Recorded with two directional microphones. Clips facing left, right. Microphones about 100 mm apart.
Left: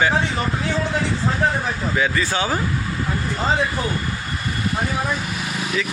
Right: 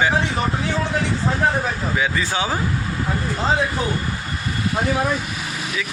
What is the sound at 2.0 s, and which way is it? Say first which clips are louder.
Speech: left 2 dB; 15° right (ahead or behind).